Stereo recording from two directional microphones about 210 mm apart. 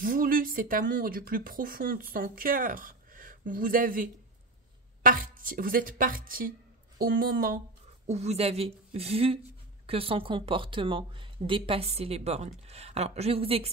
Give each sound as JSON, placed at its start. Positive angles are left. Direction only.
{"t": 0.0, "sound": "speech", "side_deg": -40}
{"t": 8.1, "sound": "speech", "side_deg": -30}